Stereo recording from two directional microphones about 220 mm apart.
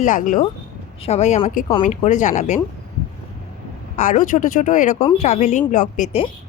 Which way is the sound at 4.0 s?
35° left (ahead or behind).